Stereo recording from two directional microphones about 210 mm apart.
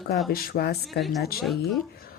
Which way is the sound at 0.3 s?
45° left (ahead or behind).